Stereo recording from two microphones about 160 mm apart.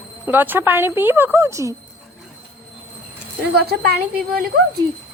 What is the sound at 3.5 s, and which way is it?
Speech, 80° right.